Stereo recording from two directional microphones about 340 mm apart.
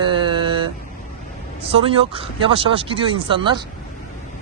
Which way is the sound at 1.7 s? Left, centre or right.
Centre.